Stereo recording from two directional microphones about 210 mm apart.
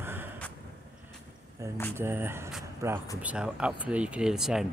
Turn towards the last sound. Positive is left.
turn(degrees=0)  # may be behind; listen again after turning